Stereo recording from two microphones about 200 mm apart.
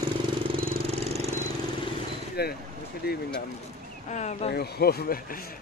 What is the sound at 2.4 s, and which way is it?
Speech, 55° left (ahead or behind).